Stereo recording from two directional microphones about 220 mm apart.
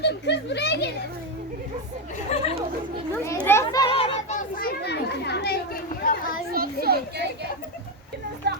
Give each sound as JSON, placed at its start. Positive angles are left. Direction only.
{"t": 0.0, "sound": "speech", "side_deg": 50}
{"t": 3.4, "sound": "children playing", "side_deg": 10}
{"t": 4.4, "sound": "chatter", "side_deg": 40}
{"t": 6.5, "sound": "children playing", "side_deg": -45}
{"t": 8.4, "sound": "a sound", "side_deg": -50}